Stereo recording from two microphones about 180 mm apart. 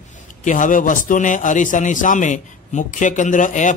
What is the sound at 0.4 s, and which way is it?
Speech, 45° left (ahead or behind).